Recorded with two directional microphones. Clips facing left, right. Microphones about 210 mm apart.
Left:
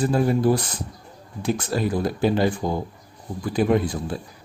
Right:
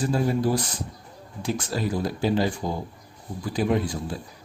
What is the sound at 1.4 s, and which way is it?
Speech, 55° left (ahead or behind).